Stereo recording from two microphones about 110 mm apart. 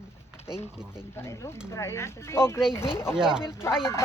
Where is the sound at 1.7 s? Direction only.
25° left (ahead or behind).